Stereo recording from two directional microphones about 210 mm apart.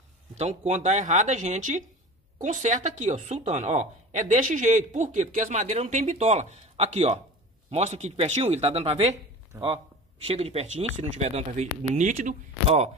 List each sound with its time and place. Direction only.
0.3 s speech: 35° right (ahead or behind)
9.5 s speech: 10° right (ahead or behind)
10.2 s speech: 30° right (ahead or behind)